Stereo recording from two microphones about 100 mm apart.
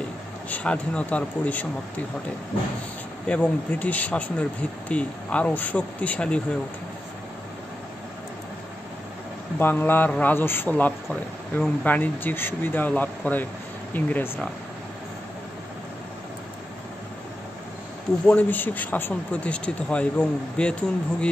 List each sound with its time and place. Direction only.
0.5 s speech: 15° left (ahead or behind)
3.3 s speech: 10° left (ahead or behind)
9.6 s speech: 20° left (ahead or behind)
18.2 s speech: 15° left (ahead or behind)